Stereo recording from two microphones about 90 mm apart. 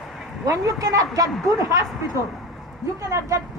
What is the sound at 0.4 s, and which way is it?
Speech, 40° right (ahead or behind).